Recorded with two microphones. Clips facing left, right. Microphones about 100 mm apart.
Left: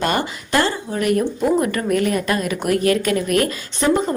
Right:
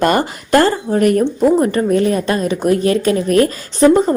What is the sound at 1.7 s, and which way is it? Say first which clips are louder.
A woman's voice: right 5 dB; 30° right (ahead or behind).